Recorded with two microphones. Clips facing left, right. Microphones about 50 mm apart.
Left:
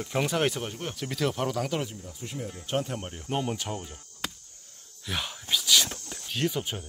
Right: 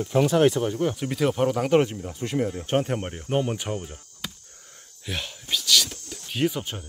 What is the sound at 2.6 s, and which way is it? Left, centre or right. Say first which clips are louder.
Speech: right 6 dB; right.